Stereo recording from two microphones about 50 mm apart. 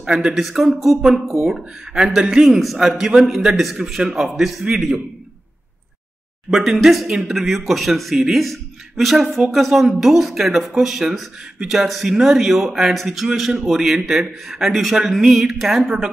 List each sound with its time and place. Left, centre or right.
0.0 s a man's voice: centre
0.4 s a man's voice: centre
2.4 s a man's voice: centre
3.7 s a man's voice: centre
6.5 s a man's voice: centre